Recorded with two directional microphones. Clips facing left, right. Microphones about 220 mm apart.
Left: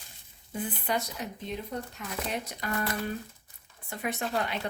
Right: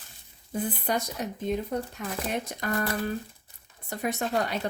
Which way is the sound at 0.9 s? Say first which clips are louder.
Right 3 dB; 45° right (ahead or behind).